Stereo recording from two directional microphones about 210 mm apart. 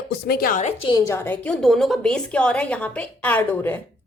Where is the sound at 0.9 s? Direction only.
15° left (ahead or behind).